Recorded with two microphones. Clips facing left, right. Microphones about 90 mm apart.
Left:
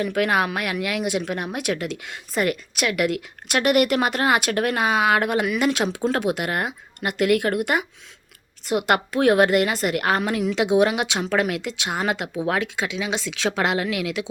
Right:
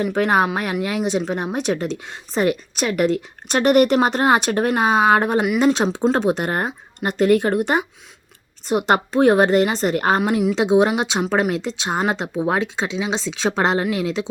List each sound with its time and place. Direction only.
0.0 s speech: 25° right (ahead or behind)
10.2 s speech: 20° right (ahead or behind)